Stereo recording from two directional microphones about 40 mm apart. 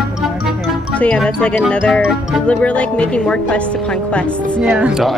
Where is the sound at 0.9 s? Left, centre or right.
Left.